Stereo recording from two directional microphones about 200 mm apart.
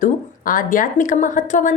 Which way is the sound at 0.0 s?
40° left (ahead or behind).